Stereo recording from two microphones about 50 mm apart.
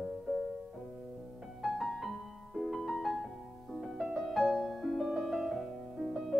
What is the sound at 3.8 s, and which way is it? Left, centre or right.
Music, centre.